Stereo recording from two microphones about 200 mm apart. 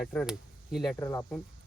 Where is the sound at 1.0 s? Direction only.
15° left (ahead or behind).